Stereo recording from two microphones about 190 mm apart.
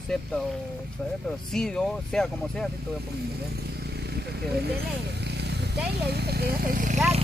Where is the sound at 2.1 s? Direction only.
Centre (ahead or behind).